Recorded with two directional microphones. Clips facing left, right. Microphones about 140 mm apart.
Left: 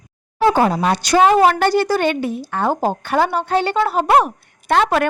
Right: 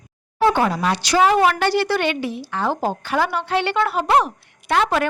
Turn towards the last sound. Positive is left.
turn(degrees=55)  # may be behind; listen again after turning